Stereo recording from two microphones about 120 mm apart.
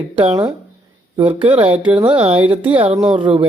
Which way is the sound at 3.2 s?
45° right (ahead or behind).